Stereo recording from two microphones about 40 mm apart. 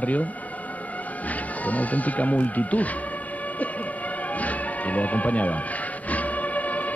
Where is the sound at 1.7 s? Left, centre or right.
Left.